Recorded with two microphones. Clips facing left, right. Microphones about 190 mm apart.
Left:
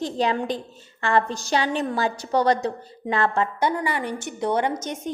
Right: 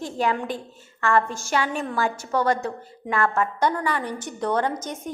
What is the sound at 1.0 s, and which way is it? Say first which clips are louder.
Speech: even; 30° left (ahead or behind).